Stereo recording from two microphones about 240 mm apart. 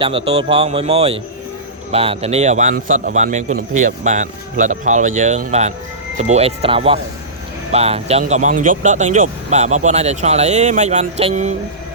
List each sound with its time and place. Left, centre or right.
0.0 s speech: right